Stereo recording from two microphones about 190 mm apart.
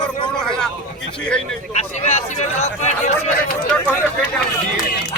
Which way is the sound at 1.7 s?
35° left (ahead or behind).